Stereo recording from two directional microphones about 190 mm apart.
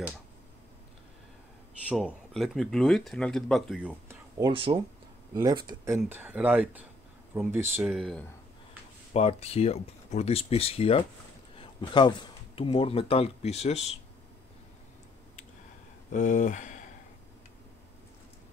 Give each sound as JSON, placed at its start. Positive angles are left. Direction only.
{"t": 2.0, "sound": "speech", "side_deg": 0}
{"t": 4.4, "sound": "speech", "side_deg": -30}
{"t": 7.8, "sound": "speech", "side_deg": 0}
{"t": 9.1, "sound": "speech", "side_deg": 35}
{"t": 16.1, "sound": "speech", "side_deg": 40}